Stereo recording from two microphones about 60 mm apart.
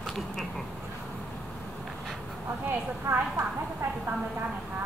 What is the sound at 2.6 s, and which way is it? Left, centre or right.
Speech, right.